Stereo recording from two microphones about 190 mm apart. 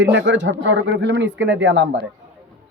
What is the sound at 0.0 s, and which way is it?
Speech, 70° right (ahead or behind).